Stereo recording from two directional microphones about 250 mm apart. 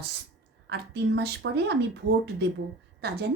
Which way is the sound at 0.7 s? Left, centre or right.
Right.